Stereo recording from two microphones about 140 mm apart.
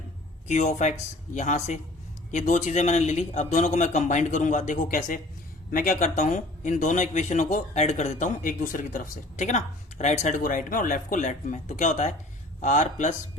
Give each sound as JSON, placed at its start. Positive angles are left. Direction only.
{"t": 0.4, "sound": "a man's voice", "side_deg": 55}